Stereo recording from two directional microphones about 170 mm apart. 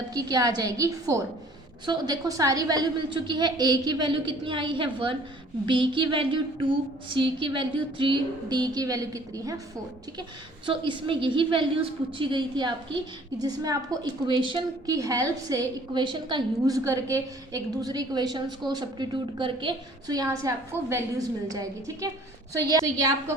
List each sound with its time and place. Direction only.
0.1 s a woman's voice: 20° right (ahead or behind)
10.7 s a woman's voice: 30° right (ahead or behind)